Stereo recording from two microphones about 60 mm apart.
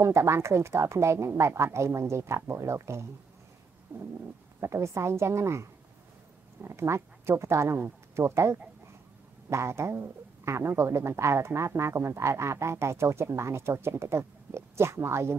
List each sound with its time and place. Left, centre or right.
0.0 s speech: right
3.9 s bird: right
4.6 s speech: right